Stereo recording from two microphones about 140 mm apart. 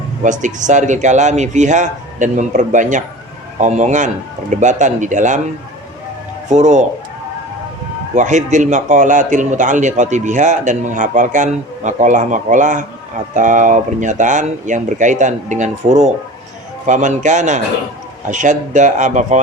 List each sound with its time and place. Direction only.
0.2 s a man's voice: 65° right (ahead or behind)
6.5 s a man's voice: 55° right (ahead or behind)
8.1 s a man's voice: 60° right (ahead or behind)